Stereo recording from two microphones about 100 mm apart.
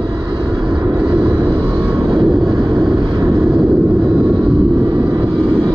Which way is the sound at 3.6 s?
25° right (ahead or behind).